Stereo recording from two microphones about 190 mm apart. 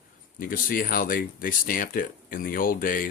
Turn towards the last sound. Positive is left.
turn(degrees=45)  # may be behind; listen again after turning